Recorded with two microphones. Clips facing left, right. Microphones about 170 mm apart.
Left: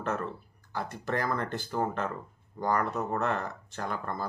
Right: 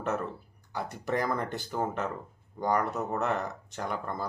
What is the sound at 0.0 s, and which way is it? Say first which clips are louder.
Speech: right 1 dB; 15° right (ahead or behind).